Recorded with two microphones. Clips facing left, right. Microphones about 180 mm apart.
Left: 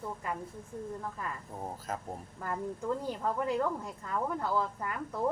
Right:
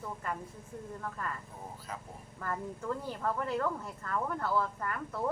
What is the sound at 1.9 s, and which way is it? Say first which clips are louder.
Speech: left 5 dB; 45° left (ahead or behind).